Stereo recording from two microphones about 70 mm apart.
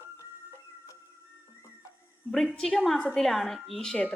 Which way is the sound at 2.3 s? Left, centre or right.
Centre.